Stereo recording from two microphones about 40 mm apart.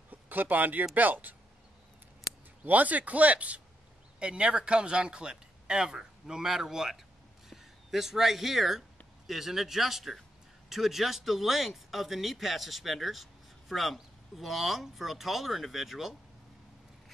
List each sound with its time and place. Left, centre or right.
0.1 s speech: right
2.6 s speech: right; by 16.2 s centre